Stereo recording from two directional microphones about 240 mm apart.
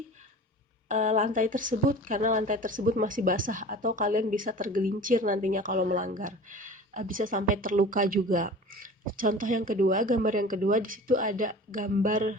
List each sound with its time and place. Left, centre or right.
0.9 s a woman's voice: right